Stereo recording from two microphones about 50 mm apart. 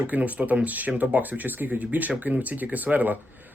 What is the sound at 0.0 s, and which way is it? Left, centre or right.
Speech, right.